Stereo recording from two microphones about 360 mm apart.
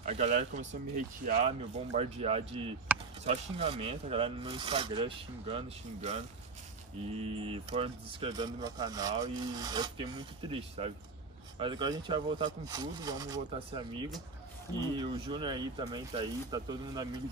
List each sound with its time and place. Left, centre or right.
0.0 s speech: centre
15.0 s speech: centre